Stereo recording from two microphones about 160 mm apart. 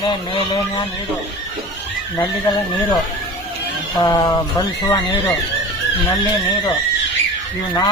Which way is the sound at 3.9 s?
25° left (ahead or behind).